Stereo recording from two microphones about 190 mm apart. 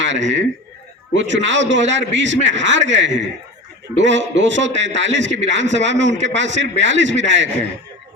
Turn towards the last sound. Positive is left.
turn(degrees=-70)  # may be behind; listen again after turning